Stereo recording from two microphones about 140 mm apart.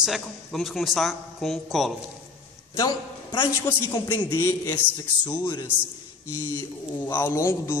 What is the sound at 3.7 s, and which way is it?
A man's voice, 15° left (ahead or behind).